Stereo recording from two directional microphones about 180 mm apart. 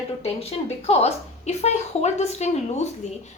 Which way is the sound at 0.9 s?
35° left (ahead or behind).